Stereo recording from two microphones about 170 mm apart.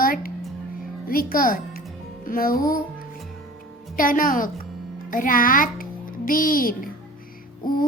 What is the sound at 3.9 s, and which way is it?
A child's voice, 55° left (ahead or behind).